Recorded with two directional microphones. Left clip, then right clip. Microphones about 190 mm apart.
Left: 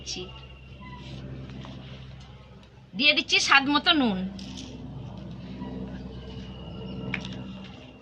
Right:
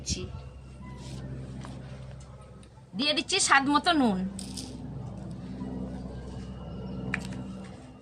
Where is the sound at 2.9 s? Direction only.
20° right (ahead or behind).